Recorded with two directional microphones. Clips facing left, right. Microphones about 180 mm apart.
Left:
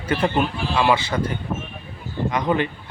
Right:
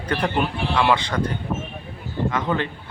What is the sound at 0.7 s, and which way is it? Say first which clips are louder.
A man's voice: left 1 dB; 5° left (ahead or behind).